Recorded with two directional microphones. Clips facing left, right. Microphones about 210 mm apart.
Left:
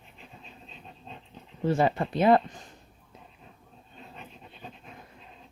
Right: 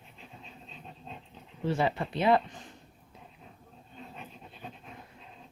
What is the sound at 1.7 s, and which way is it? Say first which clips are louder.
Speech: left 4 dB; 45° left (ahead or behind).